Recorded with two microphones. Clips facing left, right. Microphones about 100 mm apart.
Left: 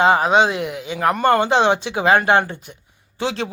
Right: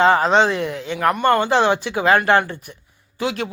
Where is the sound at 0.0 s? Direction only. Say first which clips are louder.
Even; 15° left (ahead or behind).